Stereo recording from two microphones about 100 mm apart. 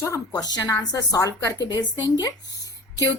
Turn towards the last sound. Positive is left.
turn(degrees=35)  # may be behind; listen again after turning